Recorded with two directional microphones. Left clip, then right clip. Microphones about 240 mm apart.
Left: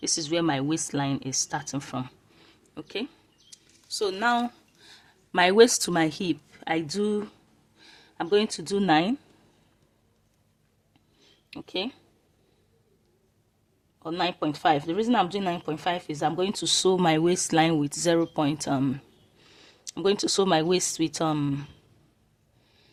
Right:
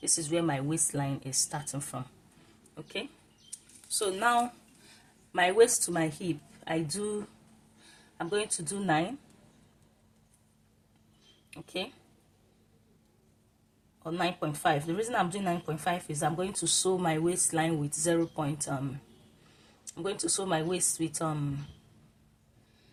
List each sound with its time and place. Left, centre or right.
0.0 s speech: left
2.7 s speech: left
11.5 s speech: left
14.0 s speech: left